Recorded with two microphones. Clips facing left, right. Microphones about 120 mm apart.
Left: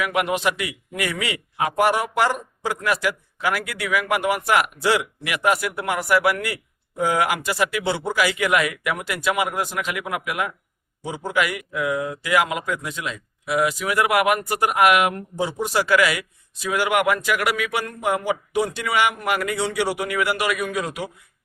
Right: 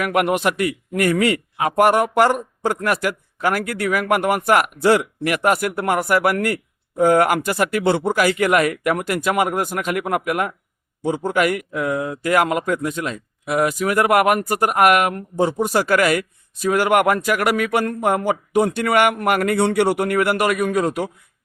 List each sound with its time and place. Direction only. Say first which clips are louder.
0.0 s a man's voice: right 3 dB; 55° right (ahead or behind)